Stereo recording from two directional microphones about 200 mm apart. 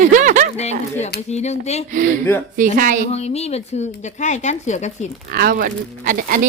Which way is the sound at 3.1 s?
30° left (ahead or behind).